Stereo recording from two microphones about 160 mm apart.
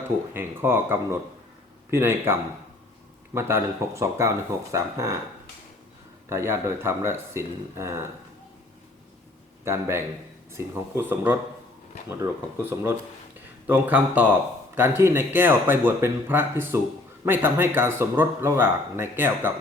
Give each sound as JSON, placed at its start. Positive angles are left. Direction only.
{"t": 0.3, "sound": "speech", "side_deg": -15}
{"t": 6.2, "sound": "speech", "side_deg": -15}
{"t": 9.6, "sound": "speech", "side_deg": -15}